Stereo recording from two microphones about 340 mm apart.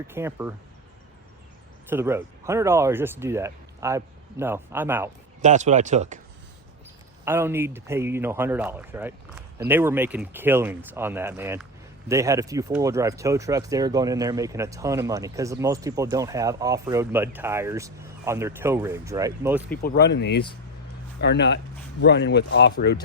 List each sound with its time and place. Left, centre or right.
0.1 s speech: centre
1.9 s speech: centre
5.4 s speech: right
7.3 s speech: centre
19.8 s speech: left